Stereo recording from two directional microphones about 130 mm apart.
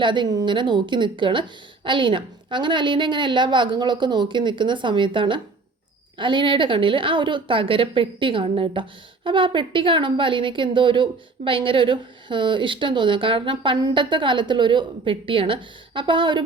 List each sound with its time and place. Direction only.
0.0 s a woman's voice: 35° right (ahead or behind)